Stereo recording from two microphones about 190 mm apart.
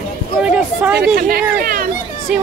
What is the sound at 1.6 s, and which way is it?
Speech, 50° right (ahead or behind).